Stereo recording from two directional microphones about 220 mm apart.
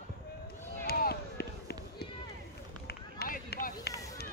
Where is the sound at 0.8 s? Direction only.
45° left (ahead or behind).